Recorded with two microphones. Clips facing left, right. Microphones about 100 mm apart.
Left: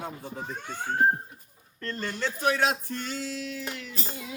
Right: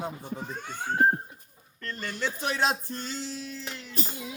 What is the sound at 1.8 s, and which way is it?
Music, 35° left (ahead or behind).